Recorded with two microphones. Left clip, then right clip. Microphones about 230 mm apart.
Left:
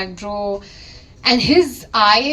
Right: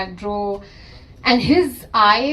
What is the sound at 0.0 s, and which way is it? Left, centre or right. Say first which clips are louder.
A woman's voice: even; left.